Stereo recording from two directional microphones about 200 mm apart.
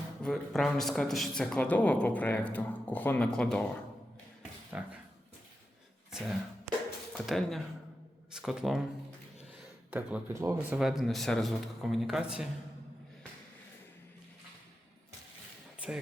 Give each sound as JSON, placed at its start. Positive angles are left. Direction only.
{"t": 0.2, "sound": "speech", "side_deg": 0}
{"t": 4.7, "sound": "speech", "side_deg": -10}
{"t": 6.1, "sound": "a sound", "side_deg": 0}
{"t": 7.1, "sound": "speech", "side_deg": 0}
{"t": 9.9, "sound": "speech", "side_deg": -5}